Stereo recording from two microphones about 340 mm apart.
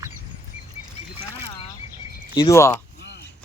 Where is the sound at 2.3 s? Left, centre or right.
Centre.